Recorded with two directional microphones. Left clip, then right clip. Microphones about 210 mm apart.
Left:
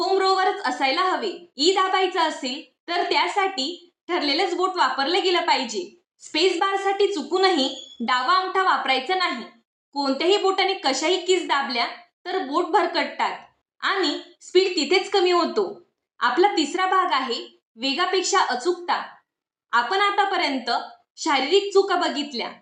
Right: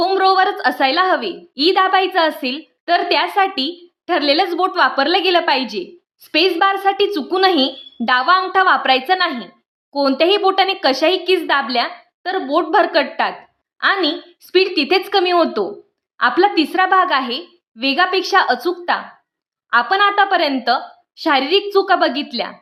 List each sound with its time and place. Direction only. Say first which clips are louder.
0.0 s a woman's voice: right 6 dB; 50° right (ahead or behind)